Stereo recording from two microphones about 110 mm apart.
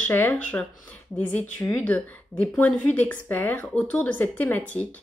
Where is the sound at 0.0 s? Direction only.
15° left (ahead or behind).